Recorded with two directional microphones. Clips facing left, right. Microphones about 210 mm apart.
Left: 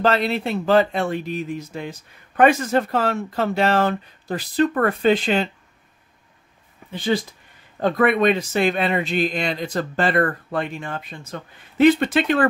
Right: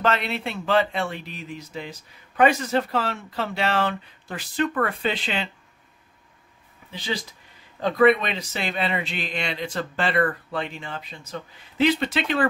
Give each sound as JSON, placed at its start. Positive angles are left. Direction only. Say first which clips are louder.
{"t": 0.0, "sound": "speech", "louder": "left 5 dB", "side_deg": 35}
{"t": 6.9, "sound": "speech", "louder": "left 8 dB", "side_deg": 50}